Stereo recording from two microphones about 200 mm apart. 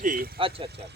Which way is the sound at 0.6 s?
55° right (ahead or behind).